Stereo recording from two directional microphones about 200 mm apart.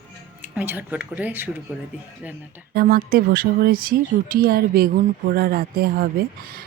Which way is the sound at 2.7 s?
50° right (ahead or behind).